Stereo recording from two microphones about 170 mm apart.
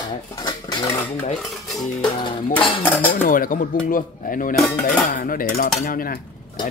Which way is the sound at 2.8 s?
10° left (ahead or behind).